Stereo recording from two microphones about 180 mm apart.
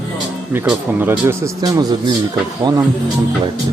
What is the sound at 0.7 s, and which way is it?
Speech, 10° right (ahead or behind).